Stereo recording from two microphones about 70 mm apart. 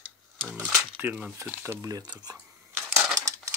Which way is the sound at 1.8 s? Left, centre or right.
Right.